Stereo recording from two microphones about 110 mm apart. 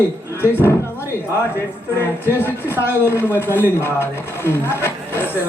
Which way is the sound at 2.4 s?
20° left (ahead or behind).